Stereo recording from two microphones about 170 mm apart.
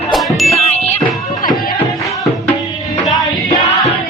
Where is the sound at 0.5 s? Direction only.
40° left (ahead or behind).